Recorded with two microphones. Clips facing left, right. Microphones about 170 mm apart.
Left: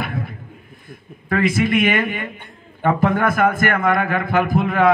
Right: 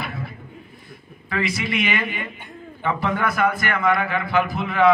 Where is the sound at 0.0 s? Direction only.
50° left (ahead or behind).